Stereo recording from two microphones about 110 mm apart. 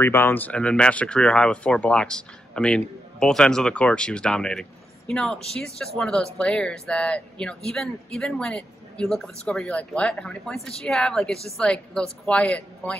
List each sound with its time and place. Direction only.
0.0 s a woman's voice: 20° left (ahead or behind)